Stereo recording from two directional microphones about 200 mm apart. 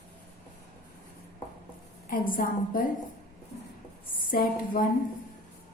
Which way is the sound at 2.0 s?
45° left (ahead or behind).